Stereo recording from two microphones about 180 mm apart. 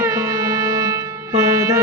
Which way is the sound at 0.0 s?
20° right (ahead or behind).